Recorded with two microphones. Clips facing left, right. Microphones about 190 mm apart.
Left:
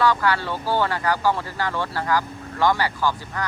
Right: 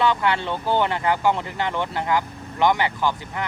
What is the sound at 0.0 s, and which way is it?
Speech, 25° right (ahead or behind).